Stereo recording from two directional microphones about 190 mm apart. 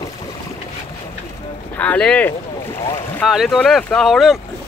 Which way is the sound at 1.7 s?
5° left (ahead or behind).